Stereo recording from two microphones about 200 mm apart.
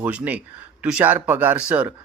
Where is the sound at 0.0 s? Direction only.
5° right (ahead or behind).